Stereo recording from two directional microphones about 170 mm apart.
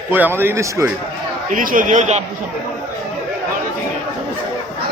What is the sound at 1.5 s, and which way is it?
Speech, 55° right (ahead or behind).